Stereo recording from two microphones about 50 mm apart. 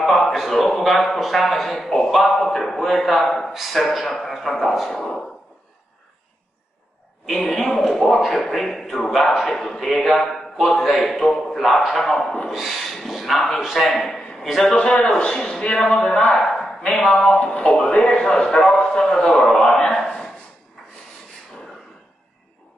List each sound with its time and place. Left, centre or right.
0.0 s a sound: centre
0.5 s speech: centre
7.2 s speech: centre
9.5 s speech: centre
12.4 s speech: centre
14.6 s speech: centre
17.4 s speech: left
19.7 s a sound: centre